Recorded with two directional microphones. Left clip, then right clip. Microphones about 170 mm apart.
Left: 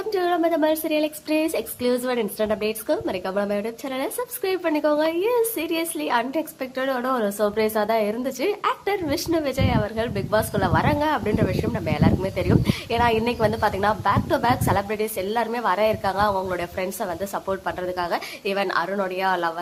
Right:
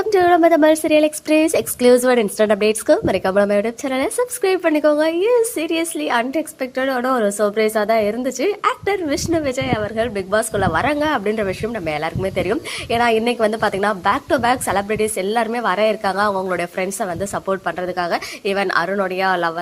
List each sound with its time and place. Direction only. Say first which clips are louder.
0.0 s speech: right 9 dB; 40° right (ahead or behind)